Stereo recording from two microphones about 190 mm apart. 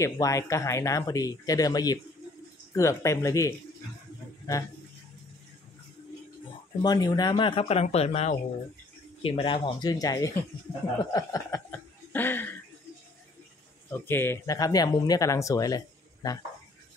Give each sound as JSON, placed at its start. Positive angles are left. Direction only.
{"t": 0.0, "sound": "speech", "side_deg": 15}
{"t": 6.8, "sound": "speech", "side_deg": 20}
{"t": 12.1, "sound": "chuckle", "side_deg": 10}
{"t": 13.8, "sound": "speech", "side_deg": 10}